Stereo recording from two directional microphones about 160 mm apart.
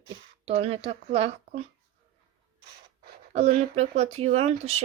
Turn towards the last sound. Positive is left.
turn(degrees=-40)  # may be behind; listen again after turning